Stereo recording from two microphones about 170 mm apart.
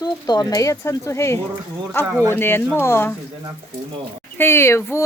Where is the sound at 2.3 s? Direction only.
15° left (ahead or behind).